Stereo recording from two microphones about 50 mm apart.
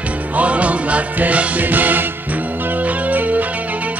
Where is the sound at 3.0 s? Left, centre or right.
Right.